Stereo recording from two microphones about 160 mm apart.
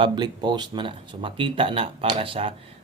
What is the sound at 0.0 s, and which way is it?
Speech, 25° right (ahead or behind).